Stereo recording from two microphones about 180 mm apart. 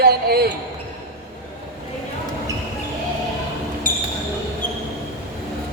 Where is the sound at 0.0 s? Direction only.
60° right (ahead or behind).